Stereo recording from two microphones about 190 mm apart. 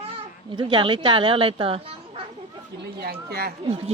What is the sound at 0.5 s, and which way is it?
A woman's voice, 25° right (ahead or behind).